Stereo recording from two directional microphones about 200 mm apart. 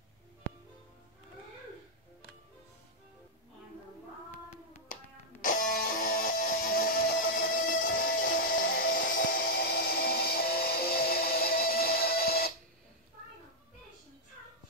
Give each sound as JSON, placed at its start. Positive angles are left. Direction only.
{"t": 5.4, "sound": "music", "side_deg": 45}